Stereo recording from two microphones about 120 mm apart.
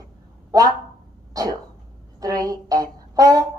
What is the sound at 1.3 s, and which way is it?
Cough, 30° right (ahead or behind).